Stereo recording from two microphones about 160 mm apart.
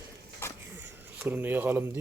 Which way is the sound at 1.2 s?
10° right (ahead or behind).